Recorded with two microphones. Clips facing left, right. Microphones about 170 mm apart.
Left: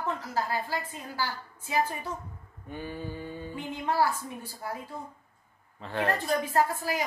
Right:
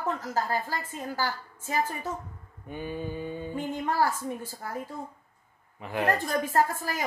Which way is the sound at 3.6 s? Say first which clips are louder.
Even; 45° right (ahead or behind).